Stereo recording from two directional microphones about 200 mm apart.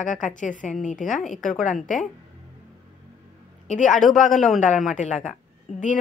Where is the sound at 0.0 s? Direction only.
40° left (ahead or behind).